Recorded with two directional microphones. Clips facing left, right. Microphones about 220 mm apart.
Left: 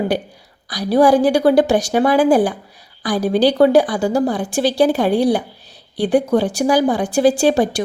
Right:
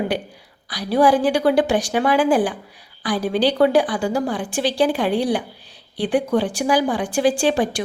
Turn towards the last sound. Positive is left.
turn(degrees=40)  # may be behind; listen again after turning